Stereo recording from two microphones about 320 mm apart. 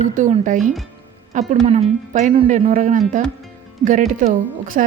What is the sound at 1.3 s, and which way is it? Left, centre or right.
Speech, right.